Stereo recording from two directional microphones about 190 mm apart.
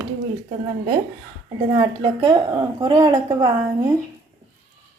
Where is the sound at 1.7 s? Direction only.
25° right (ahead or behind).